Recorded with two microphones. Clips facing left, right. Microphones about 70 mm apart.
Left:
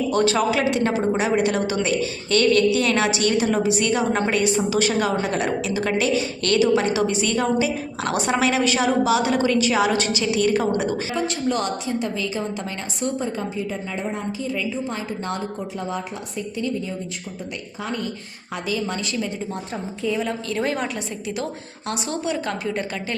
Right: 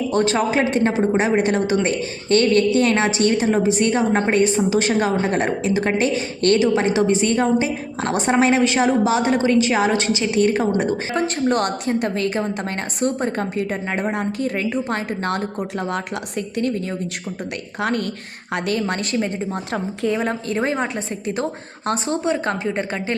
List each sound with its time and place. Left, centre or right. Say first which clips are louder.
0.1 s a woman's voice: right 1 dB; right
11.1 s a woman's voice: right 4 dB; right
17.8 s a woman's voice: right 6 dB; right
20.1 s a woman's voice: right 3 dB; right
20.6 s a woman's voice: right 2 dB; right